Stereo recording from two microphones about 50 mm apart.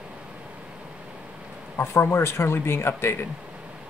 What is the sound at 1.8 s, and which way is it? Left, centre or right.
Speech, left.